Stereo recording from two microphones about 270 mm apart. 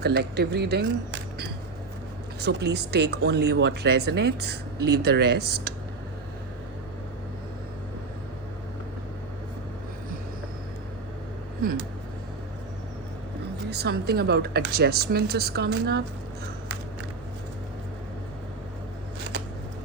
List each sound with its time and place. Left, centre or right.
0.0 s speech: right
11.6 s speech: right
13.7 s speech: right